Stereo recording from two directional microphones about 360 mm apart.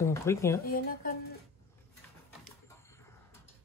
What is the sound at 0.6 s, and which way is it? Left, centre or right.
Speech, left.